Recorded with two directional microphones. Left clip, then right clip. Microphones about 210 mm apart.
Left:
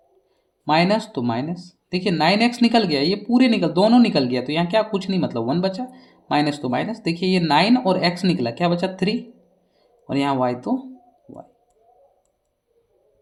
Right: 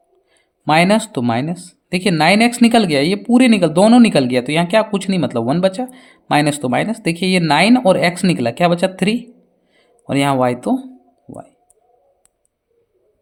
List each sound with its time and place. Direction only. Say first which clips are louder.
0.6 s speech: right 5 dB; 40° right (ahead or behind)